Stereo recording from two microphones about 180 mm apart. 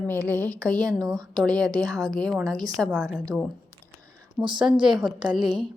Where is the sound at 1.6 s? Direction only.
20° right (ahead or behind).